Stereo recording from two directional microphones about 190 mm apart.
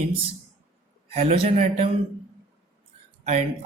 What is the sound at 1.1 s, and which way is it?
Speech, 35° right (ahead or behind).